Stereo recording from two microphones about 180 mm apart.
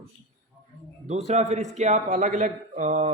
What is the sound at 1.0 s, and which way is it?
Speech, 40° right (ahead or behind).